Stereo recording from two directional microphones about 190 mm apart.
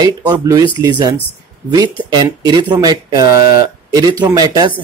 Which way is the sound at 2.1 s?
20° right (ahead or behind).